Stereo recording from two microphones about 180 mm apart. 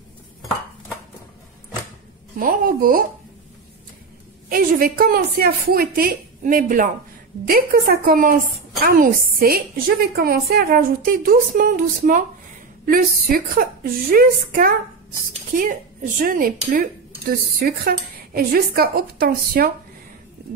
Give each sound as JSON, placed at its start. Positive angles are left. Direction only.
{"t": 2.3, "sound": "a woman's voice", "side_deg": -50}
{"t": 4.5, "sound": "a woman's voice", "side_deg": -50}
{"t": 13.3, "sound": "a woman's voice", "side_deg": -55}